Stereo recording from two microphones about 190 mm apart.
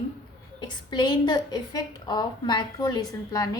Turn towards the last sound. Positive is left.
turn(degrees=20)  # may be behind; listen again after turning